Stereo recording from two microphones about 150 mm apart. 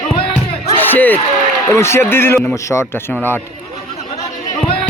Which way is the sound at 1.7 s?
15° left (ahead or behind).